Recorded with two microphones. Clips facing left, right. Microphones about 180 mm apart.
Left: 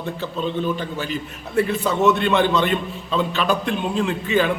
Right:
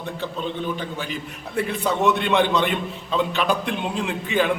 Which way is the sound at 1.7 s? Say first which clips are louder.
Even; 15° right (ahead or behind).